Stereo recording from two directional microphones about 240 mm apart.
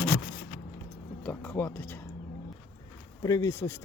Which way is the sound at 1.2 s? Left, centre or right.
Centre.